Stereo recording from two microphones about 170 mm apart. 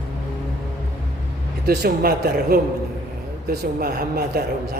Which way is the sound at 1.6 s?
65° right (ahead or behind).